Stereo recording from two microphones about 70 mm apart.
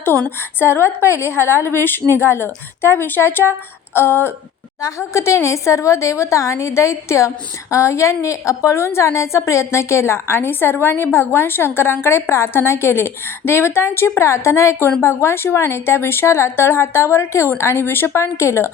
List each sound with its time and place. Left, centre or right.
0.3 s a woman's voice: left
4.8 s a woman's voice: left